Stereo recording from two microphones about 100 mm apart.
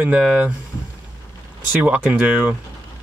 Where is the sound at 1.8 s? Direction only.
15° right (ahead or behind).